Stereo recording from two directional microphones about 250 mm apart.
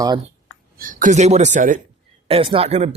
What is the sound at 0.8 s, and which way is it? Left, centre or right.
A man's voice, right.